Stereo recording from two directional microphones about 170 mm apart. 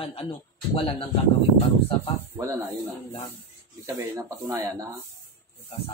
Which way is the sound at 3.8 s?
20° right (ahead or behind).